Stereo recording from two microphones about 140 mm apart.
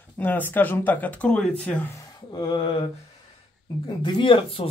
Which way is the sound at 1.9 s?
30° left (ahead or behind).